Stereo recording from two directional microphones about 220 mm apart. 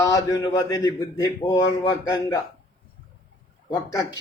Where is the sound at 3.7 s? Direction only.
15° left (ahead or behind).